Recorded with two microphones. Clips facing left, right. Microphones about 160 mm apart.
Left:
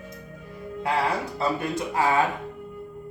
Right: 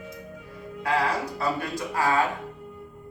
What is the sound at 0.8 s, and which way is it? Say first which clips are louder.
Speech: even; 25° left (ahead or behind).